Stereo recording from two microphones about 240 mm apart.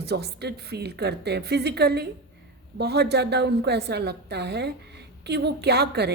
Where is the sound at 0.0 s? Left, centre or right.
Right.